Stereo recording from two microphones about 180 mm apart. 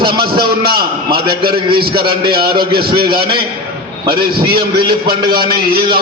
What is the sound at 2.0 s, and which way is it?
Speech, 25° right (ahead or behind).